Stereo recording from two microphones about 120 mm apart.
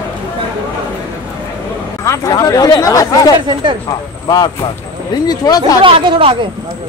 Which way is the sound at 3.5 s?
40° right (ahead or behind).